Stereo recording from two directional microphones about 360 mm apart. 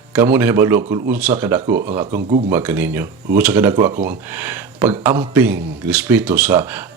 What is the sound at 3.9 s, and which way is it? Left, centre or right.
Speech, centre.